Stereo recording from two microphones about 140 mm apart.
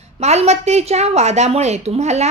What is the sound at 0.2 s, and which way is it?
A woman's voice, 50° right (ahead or behind).